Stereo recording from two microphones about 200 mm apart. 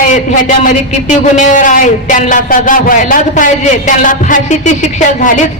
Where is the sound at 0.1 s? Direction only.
40° left (ahead or behind).